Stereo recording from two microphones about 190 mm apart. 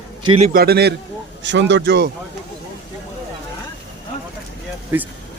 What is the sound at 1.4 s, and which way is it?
Speech, 70° right (ahead or behind).